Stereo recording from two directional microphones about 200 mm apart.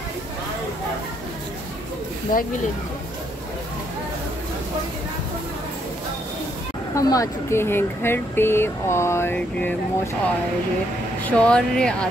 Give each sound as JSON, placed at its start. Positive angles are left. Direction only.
{"t": 2.3, "sound": "speech", "side_deg": 45}
{"t": 7.0, "sound": "speech", "side_deg": 15}
{"t": 11.2, "sound": "speech", "side_deg": 5}